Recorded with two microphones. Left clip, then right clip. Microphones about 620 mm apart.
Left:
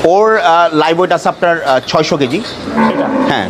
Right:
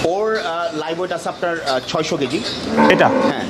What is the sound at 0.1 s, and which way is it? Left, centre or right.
Speech, left.